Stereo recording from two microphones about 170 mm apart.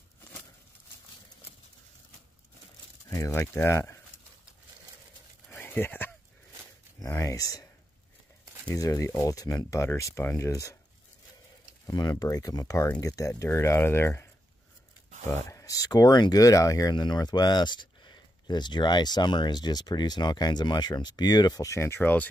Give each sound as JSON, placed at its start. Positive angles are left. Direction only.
{"t": 3.1, "sound": "speech", "side_deg": 20}
{"t": 5.5, "sound": "a sound", "side_deg": 15}
{"t": 7.0, "sound": "speech", "side_deg": 20}
{"t": 8.6, "sound": "speech", "side_deg": 20}
{"t": 11.8, "sound": "speech", "side_deg": 20}
{"t": 15.0, "sound": "a sound", "side_deg": -45}
{"t": 15.5, "sound": "speech", "side_deg": 20}